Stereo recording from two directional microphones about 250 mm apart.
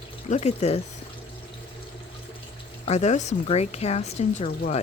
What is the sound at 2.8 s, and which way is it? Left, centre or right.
Speech, left.